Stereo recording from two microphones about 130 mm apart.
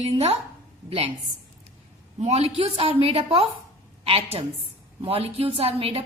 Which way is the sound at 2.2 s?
55° right (ahead or behind).